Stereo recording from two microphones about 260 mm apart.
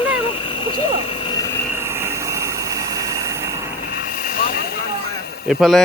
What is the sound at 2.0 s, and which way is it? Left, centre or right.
Water, centre.